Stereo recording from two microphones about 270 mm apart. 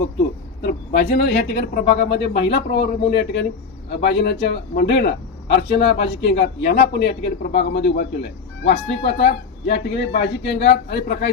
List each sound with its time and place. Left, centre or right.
0.6 s speech: left
8.7 s speech: left
9.2 s speech: left